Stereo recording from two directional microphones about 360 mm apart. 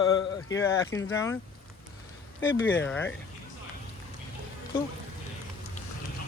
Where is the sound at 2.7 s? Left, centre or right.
Centre.